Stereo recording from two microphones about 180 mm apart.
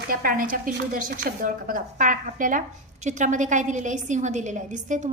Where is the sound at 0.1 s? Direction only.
50° right (ahead or behind).